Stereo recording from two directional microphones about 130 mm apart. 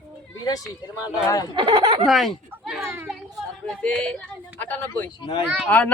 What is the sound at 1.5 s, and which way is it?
Speech, 35° right (ahead or behind).